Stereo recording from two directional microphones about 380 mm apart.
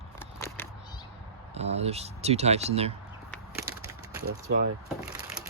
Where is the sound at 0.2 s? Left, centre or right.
Centre.